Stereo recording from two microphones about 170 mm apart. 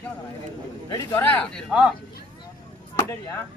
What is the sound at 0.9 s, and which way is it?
Speech, 10° left (ahead or behind).